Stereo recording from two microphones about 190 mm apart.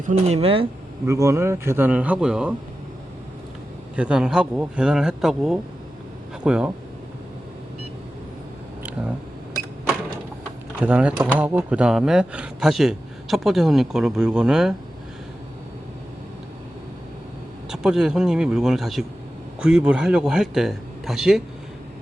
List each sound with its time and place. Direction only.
0.0 s speech: 40° right (ahead or behind)
1.0 s a man's voice: 15° right (ahead or behind)
3.9 s speech: 5° right (ahead or behind)
8.8 s a sound: 5° right (ahead or behind)
10.8 s a man's voice: 5° right (ahead or behind)
17.7 s speech: 5° right (ahead or behind)